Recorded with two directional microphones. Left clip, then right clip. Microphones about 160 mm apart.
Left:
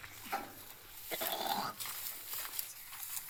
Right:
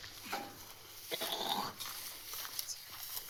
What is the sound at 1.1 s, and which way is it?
Dog, 30° left (ahead or behind).